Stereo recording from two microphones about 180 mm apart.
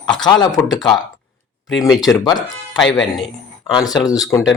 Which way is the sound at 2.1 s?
20° left (ahead or behind).